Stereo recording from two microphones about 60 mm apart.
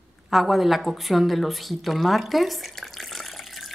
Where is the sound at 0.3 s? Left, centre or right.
Centre.